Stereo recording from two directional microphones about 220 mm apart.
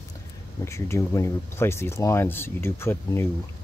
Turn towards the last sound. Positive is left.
turn(degrees=10)  # may be behind; listen again after turning